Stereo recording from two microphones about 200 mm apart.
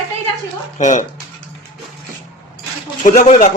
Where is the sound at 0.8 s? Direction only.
35° left (ahead or behind).